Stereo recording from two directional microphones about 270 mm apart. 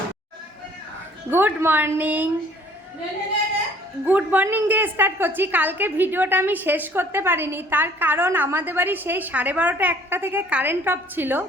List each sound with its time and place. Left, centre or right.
1.3 s a woman's voice: centre
4.0 s a woman's voice: centre